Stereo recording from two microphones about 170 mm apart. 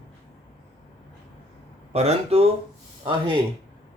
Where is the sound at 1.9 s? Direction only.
40° right (ahead or behind).